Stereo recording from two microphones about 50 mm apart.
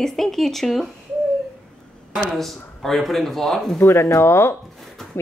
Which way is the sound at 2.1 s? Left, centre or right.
Centre.